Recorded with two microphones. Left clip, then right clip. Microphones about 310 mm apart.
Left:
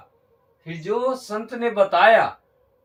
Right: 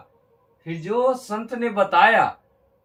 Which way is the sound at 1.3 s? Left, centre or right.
Centre.